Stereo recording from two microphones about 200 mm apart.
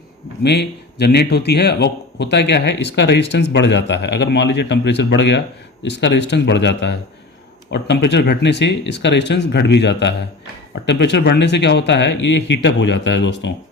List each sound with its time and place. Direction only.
0.4 s speech: 55° left (ahead or behind)